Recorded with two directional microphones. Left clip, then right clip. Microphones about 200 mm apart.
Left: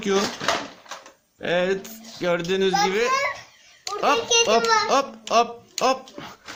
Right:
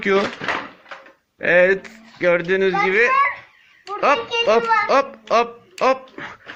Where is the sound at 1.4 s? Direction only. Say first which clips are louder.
Right 8 dB; 5° right (ahead or behind).